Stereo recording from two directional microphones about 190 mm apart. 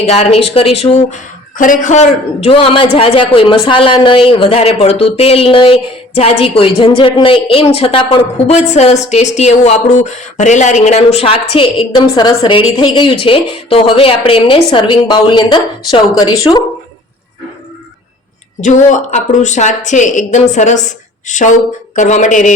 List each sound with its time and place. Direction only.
0.0 s speech: 35° left (ahead or behind)
18.6 s speech: 40° left (ahead or behind)